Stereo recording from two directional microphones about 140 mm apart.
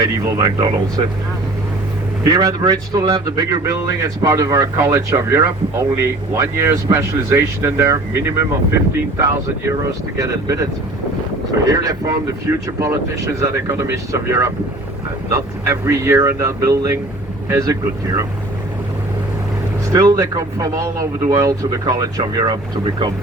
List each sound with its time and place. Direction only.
0.0 s speech: 25° right (ahead or behind)
2.2 s speech: 25° right (ahead or behind)
9.1 s speech: 20° right (ahead or behind)
11.7 s speech: 25° right (ahead or behind)
19.9 s speech: 25° right (ahead or behind)